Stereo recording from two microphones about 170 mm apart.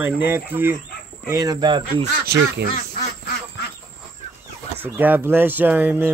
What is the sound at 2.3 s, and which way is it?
Speech, 75° right (ahead or behind).